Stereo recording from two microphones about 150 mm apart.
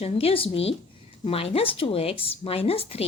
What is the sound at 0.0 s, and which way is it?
A woman's voice, 40° left (ahead or behind).